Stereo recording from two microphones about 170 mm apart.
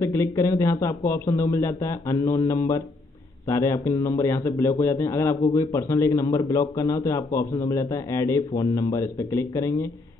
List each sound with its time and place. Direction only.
0.0 s a man's voice: 15° left (ahead or behind)